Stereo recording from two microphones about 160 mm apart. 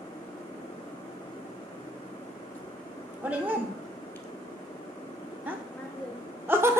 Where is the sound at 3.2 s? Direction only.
10° right (ahead or behind).